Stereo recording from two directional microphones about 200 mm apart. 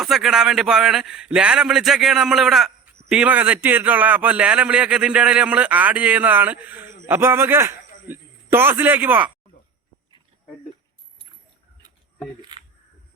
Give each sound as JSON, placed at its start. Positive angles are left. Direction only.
{"t": 0.0, "sound": "a man's voice", "side_deg": 0}
{"t": 12.4, "sound": "speech", "side_deg": -20}